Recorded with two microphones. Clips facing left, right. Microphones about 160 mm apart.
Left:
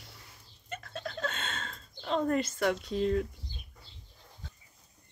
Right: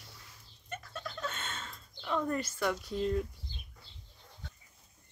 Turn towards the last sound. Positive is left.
turn(degrees=80)